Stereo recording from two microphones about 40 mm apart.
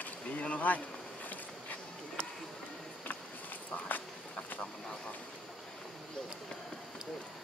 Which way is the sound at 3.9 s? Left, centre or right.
Left.